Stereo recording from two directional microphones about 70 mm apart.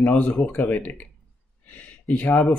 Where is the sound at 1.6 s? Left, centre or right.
Left.